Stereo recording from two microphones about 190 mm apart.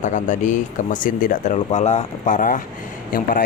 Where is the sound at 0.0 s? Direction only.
40° left (ahead or behind).